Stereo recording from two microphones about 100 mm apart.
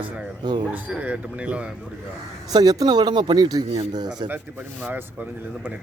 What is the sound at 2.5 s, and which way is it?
Speech, 40° right (ahead or behind).